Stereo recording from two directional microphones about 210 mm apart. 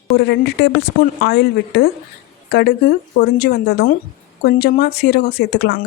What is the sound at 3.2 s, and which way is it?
Speech, 50° left (ahead or behind).